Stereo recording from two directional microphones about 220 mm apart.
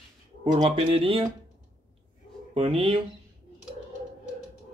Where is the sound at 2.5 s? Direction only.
25° right (ahead or behind).